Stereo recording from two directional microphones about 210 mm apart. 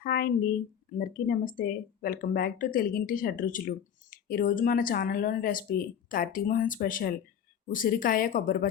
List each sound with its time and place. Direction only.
0.0 s a woman's voice: 45° left (ahead or behind)